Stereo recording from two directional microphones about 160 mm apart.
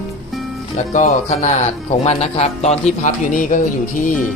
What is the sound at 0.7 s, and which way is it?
Speech, 45° left (ahead or behind).